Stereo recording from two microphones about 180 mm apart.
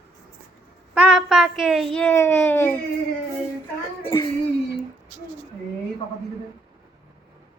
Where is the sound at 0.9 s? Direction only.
5° right (ahead or behind); by 2.8 s 10° left (ahead or behind).